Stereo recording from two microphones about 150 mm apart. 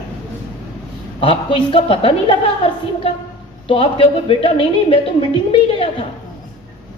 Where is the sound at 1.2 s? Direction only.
35° left (ahead or behind).